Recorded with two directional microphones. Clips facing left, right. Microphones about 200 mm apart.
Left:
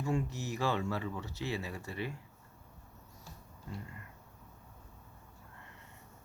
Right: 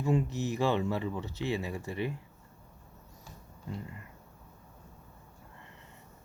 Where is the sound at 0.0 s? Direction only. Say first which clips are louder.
Right 5 dB; 20° right (ahead or behind).